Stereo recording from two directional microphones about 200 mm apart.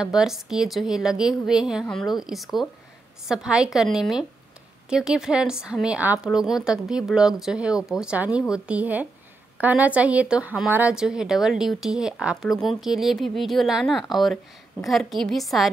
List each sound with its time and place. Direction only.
0.0 s speech: centre (ahead or behind)